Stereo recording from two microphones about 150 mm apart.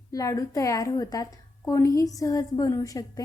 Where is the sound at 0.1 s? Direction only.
20° left (ahead or behind).